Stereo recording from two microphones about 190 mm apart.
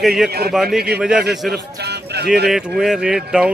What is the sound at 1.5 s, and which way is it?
Speech, 60° right (ahead or behind).